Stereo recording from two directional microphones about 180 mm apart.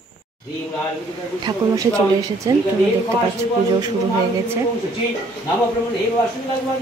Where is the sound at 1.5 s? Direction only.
25° right (ahead or behind).